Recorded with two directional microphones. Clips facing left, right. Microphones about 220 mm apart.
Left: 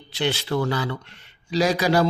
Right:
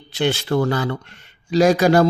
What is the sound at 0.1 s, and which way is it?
Speech, 45° right (ahead or behind).